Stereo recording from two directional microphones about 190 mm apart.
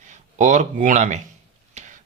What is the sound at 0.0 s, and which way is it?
Speech, 40° right (ahead or behind).